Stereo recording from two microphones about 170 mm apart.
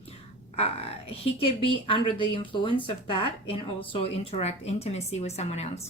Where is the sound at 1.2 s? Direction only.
30° left (ahead or behind).